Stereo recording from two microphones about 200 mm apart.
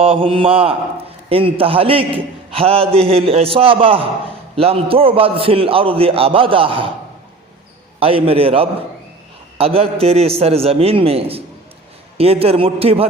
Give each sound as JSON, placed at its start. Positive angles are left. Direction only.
{"t": 0.0, "sound": "a man's voice", "side_deg": -25}
{"t": 7.9, "sound": "a man's voice", "side_deg": -30}